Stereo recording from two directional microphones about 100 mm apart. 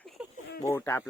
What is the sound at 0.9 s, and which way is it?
Speech, 20° left (ahead or behind).